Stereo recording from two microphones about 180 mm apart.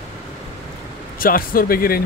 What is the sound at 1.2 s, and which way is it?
Speech, 50° left (ahead or behind).